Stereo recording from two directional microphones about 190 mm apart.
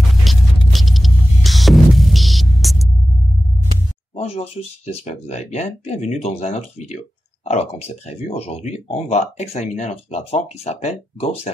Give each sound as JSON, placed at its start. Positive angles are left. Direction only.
{"t": 0.1, "sound": "hum", "side_deg": 0}
{"t": 4.2, "sound": "speech", "side_deg": 30}